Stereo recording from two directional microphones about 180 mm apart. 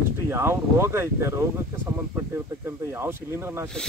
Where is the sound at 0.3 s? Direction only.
15° right (ahead or behind).